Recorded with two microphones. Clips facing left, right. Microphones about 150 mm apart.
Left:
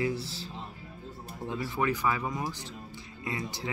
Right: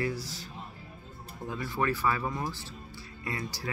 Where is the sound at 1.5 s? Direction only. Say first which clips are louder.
Even; 20° left (ahead or behind).